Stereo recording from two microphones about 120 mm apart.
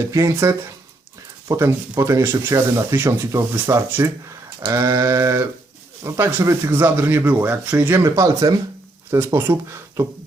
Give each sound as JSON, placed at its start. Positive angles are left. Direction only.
{"t": 0.1, "sound": "speech", "side_deg": -25}
{"t": 8.0, "sound": "speech", "side_deg": -25}